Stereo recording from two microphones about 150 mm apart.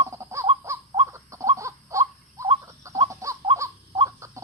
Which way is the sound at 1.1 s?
20° right (ahead or behind).